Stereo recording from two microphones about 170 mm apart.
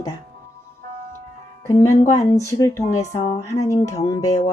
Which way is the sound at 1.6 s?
20° left (ahead or behind).